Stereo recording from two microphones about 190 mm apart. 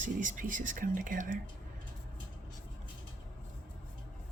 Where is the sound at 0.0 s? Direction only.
45° right (ahead or behind).